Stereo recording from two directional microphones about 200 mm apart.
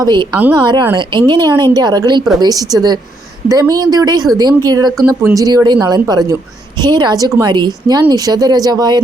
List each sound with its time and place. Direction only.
0.0 s speech: 25° right (ahead or behind)